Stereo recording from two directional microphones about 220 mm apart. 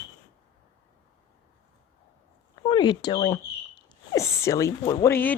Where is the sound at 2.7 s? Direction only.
20° left (ahead or behind).